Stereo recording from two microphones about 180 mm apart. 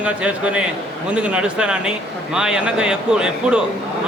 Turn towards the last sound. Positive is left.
turn(degrees=-5)  # may be behind; listen again after turning